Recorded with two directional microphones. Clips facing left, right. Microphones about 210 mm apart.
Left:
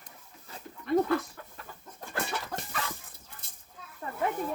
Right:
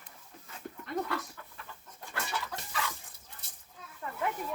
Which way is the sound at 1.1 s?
50° left (ahead or behind).